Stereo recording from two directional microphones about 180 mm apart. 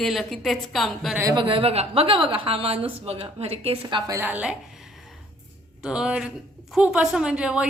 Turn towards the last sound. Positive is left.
turn(degrees=-5)  # may be behind; listen again after turning